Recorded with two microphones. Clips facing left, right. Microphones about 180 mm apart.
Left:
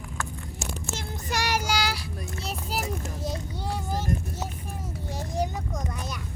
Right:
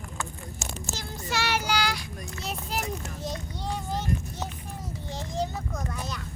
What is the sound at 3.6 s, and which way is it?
Child singing, 5° left (ahead or behind).